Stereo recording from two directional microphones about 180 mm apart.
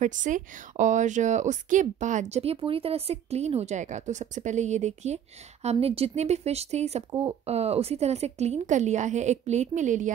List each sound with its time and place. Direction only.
0.0 s a woman's voice: 45° right (ahead or behind)
7.1 s speech: 20° right (ahead or behind)
7.4 s a woman's voice: 35° right (ahead or behind)